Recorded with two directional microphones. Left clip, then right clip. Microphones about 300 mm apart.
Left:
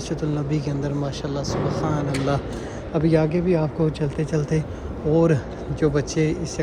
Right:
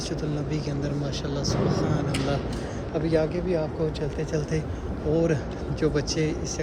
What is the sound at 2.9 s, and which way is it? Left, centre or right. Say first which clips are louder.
Speech: left 4 dB; centre.